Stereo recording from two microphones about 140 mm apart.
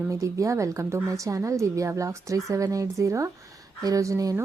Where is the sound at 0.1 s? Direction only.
25° right (ahead or behind).